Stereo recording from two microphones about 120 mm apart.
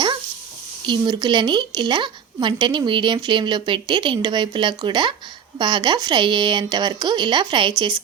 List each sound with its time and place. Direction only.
0.9 s a woman's voice: 35° right (ahead or behind)